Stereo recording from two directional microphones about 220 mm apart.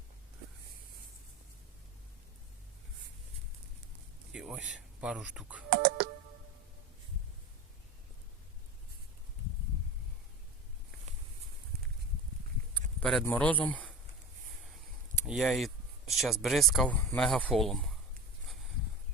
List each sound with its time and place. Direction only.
4.3 s speech: 5° right (ahead or behind)
5.7 s computer keyboard: 45° right (ahead or behind)
11.1 s a sound: 30° right (ahead or behind)
12.7 s speech: 5° left (ahead or behind)
15.3 s speech: centre (ahead or behind)